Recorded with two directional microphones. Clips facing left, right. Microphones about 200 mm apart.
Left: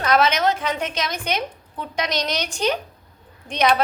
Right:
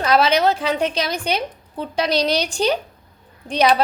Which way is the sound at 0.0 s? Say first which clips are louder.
Right 2 dB; 30° right (ahead or behind).